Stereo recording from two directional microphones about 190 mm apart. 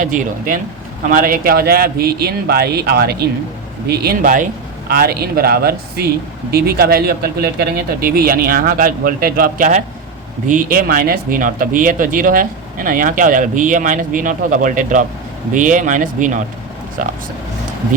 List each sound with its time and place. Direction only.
0.0 s speech: 45° right (ahead or behind)